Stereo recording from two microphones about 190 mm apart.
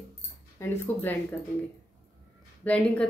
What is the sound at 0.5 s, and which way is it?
Speech, 10° left (ahead or behind).